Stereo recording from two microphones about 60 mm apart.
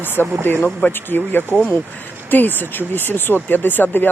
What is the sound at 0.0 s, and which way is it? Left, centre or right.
Speech, left.